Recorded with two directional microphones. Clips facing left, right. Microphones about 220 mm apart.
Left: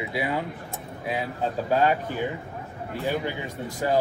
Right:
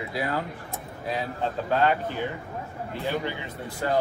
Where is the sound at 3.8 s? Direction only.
10° left (ahead or behind).